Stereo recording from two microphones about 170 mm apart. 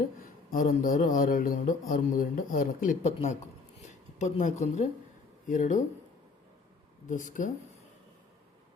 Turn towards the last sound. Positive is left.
turn(degrees=50)  # may be behind; listen again after turning